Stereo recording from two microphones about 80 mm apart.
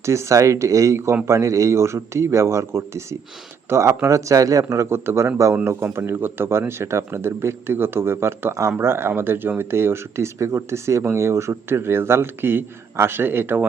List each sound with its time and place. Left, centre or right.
0.0 s speech: right